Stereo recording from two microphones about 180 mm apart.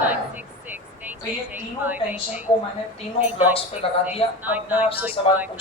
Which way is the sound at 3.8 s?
30° left (ahead or behind).